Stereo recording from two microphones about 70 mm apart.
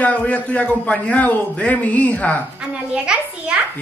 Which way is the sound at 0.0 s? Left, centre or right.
Left.